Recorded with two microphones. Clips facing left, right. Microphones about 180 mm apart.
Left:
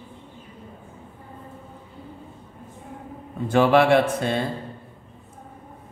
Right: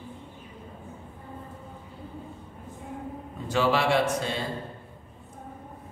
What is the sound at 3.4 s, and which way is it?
A man's voice, 55° left (ahead or behind).